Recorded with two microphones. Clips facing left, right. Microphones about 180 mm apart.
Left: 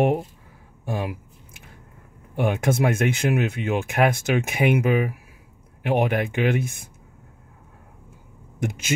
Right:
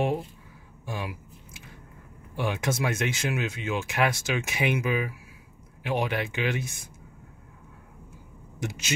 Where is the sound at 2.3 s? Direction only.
55° left (ahead or behind).